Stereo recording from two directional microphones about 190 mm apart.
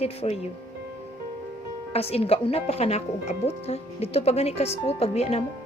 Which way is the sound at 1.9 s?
30° left (ahead or behind).